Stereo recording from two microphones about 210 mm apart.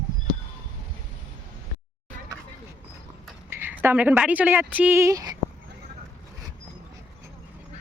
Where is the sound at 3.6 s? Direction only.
10° right (ahead or behind).